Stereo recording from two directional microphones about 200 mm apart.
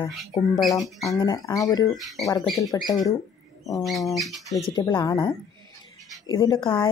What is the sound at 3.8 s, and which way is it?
Bird, centre (ahead or behind).